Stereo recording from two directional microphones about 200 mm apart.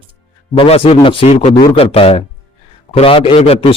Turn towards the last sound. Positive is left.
turn(degrees=30)  # may be behind; listen again after turning